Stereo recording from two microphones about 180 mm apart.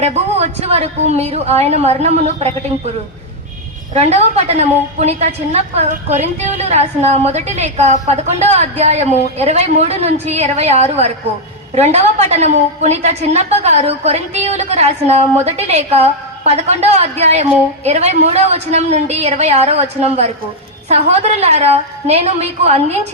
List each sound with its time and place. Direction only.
0.0 s a woman's voice: 35° right (ahead or behind)
3.9 s a woman's voice: 35° right (ahead or behind)